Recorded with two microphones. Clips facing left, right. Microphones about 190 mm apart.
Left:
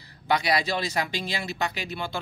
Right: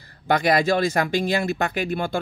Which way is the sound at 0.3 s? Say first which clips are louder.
Right 6 dB; 50° right (ahead or behind).